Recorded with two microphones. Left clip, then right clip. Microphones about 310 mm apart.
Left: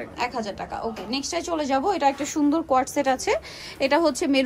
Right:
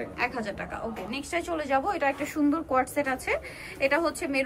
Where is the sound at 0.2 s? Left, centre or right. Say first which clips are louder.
Left 3 dB; centre.